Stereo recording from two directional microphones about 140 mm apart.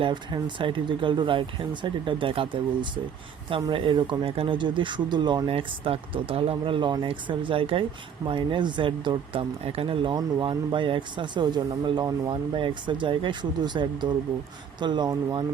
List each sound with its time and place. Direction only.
0.0 s speech: 35° right (ahead or behind)